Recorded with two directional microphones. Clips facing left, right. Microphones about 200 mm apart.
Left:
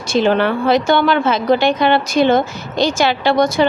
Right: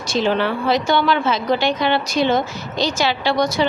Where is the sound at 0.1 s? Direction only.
55° left (ahead or behind).